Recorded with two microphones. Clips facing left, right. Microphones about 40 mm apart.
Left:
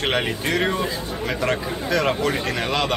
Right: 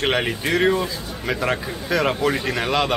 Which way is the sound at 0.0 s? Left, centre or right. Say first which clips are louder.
Right 1 dB; centre.